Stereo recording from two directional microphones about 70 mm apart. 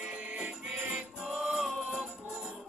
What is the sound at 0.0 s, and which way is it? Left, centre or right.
Music, centre.